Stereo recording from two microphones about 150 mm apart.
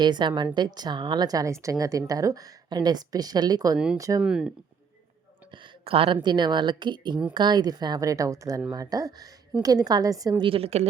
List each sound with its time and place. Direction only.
0.0 s speech: 30° right (ahead or behind)
4.2 s speech: 5° right (ahead or behind)
5.8 s speech: 40° right (ahead or behind); by 10.3 s 25° right (ahead or behind)
10.4 s speech: 40° right (ahead or behind)